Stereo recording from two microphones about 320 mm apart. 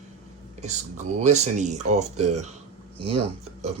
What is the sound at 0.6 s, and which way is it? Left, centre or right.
Speech, right.